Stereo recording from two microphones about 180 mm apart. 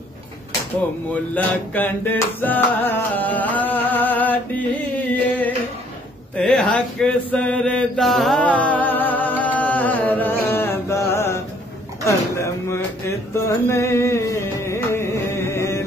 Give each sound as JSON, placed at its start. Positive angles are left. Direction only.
{"t": 1.1, "sound": "music", "side_deg": 10}
{"t": 6.3, "sound": "mantra", "side_deg": 5}
{"t": 12.0, "sound": "a sound", "side_deg": 15}
{"t": 13.3, "sound": "music", "side_deg": 15}